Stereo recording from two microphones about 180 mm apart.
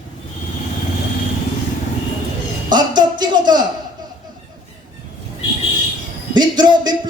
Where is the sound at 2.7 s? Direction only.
25° right (ahead or behind).